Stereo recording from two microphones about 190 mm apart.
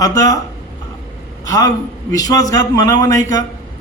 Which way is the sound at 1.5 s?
20° left (ahead or behind).